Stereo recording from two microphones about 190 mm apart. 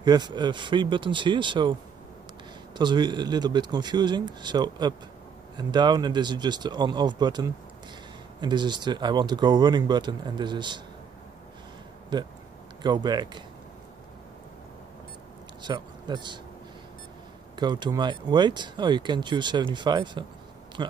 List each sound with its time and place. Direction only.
0.0 s speech: 20° right (ahead or behind)
12.1 s speech: 25° right (ahead or behind)
15.6 s speech: 20° right (ahead or behind)
17.6 s speech: 25° right (ahead or behind)